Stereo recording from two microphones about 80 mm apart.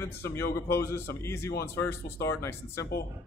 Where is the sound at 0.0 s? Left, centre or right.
Left.